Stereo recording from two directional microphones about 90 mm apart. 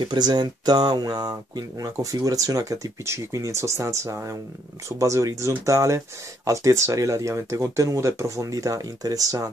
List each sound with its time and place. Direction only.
0.0 s speech: 50° right (ahead or behind)